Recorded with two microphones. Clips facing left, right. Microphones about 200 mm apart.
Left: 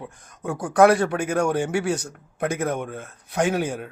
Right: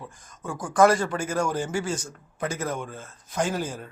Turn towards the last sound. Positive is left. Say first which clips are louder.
# left 5 dB
turn(degrees=65)  # may be behind; listen again after turning